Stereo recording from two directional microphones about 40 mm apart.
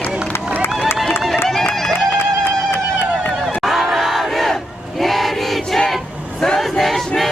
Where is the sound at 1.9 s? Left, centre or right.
Left.